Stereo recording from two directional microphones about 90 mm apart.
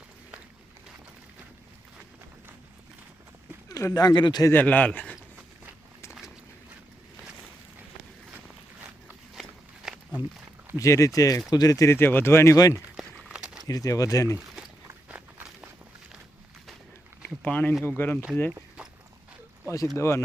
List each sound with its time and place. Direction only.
3.7 s speech: 40° left (ahead or behind)
4.5 s speech: 15° left (ahead or behind)
6.1 s a sound: 5° right (ahead or behind)
9.3 s walk: 5° right (ahead or behind)
10.8 s speech: 35° left (ahead or behind)
11.9 s speech: 25° left (ahead or behind)
13.0 s crumpling: 5° right (ahead or behind)
13.7 s speech: 40° left (ahead or behind)
17.2 s a sound: 20° left (ahead or behind)
17.8 s speech: 20° left (ahead or behind)
19.6 s speech: 40° left (ahead or behind)